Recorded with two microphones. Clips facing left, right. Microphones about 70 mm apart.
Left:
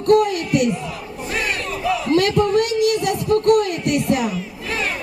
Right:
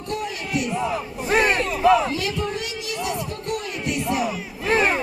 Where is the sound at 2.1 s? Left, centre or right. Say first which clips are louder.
Left 10 dB; left.